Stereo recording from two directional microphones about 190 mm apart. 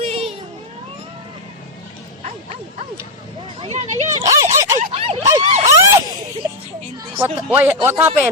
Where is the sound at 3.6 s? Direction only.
35° right (ahead or behind).